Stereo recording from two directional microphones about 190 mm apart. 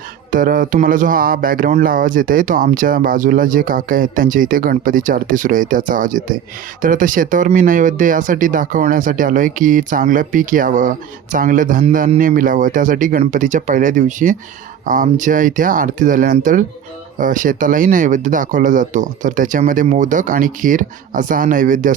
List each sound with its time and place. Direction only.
0.3 s speech: 45° right (ahead or behind)